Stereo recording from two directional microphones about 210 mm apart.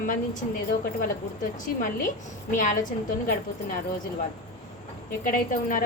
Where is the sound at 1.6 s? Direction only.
40° left (ahead or behind).